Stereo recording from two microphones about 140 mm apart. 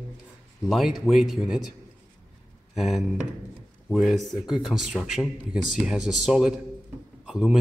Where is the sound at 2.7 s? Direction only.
Centre (ahead or behind).